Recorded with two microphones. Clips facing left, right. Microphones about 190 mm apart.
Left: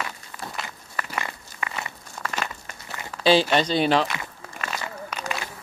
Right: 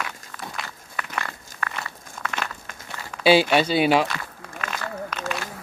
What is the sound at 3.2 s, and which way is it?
Speech, 10° right (ahead or behind).